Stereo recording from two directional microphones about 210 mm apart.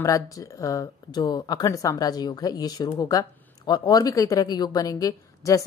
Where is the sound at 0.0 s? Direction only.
15° left (ahead or behind).